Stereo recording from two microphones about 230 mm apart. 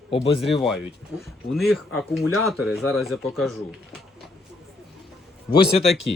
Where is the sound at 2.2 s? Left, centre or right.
Left.